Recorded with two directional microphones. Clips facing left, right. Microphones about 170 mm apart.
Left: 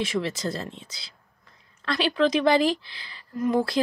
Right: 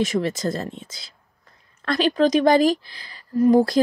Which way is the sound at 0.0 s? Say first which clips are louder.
Right 5 dB; 45° right (ahead or behind).